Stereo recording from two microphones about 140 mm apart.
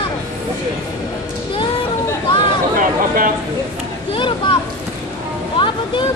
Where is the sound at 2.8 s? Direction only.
80° right.